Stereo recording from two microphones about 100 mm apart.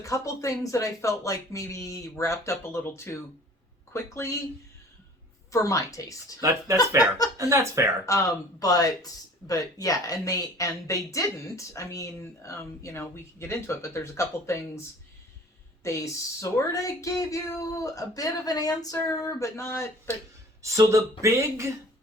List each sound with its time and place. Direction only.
0.0 s speech: 30° left (ahead or behind)
5.5 s speech: 30° left (ahead or behind)
6.4 s speech: 30° right (ahead or behind)
8.0 s speech: 35° left (ahead or behind)
15.8 s speech: 30° left (ahead or behind)
20.6 s speech: 30° right (ahead or behind)